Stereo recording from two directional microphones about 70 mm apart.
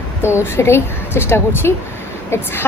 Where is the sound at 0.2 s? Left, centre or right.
Left.